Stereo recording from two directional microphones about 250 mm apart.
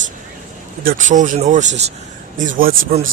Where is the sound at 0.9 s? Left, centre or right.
Right.